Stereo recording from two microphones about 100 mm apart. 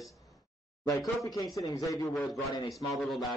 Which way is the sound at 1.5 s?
35° left (ahead or behind).